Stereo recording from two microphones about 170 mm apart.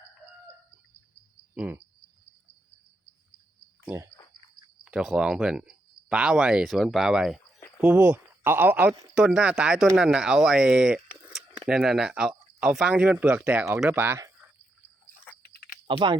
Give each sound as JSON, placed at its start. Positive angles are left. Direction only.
{"t": 1.5, "sound": "speech", "side_deg": -10}
{"t": 3.8, "sound": "speech", "side_deg": -15}
{"t": 15.9, "sound": "speech", "side_deg": -25}